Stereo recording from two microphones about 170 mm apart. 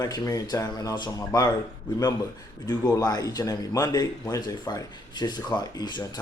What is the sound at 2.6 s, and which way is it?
A man's voice, 20° left (ahead or behind).